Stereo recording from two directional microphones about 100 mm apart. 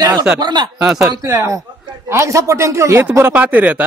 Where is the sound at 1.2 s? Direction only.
35° right (ahead or behind).